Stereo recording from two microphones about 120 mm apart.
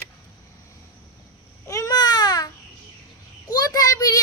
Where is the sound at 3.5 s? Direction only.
30° left (ahead or behind).